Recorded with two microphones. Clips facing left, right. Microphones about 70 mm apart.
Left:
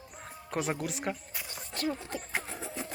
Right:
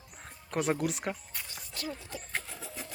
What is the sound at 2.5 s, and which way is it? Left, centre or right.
Vehicle, left.